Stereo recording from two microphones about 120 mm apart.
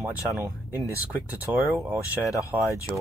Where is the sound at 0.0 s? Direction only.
20° right (ahead or behind).